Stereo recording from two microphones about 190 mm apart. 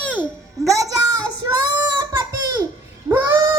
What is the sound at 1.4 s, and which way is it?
Child singing, 20° right (ahead or behind).